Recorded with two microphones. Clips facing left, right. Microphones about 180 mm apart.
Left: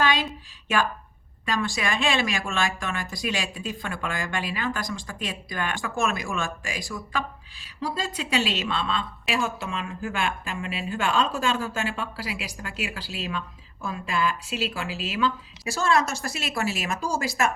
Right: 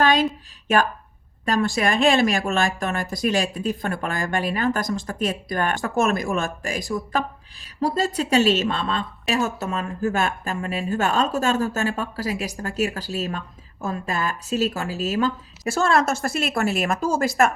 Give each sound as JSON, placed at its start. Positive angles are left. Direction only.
{"t": 0.0, "sound": "a sound", "side_deg": -45}
{"t": 1.5, "sound": "a woman's voice", "side_deg": -40}
{"t": 15.7, "sound": "a woman's voice", "side_deg": -55}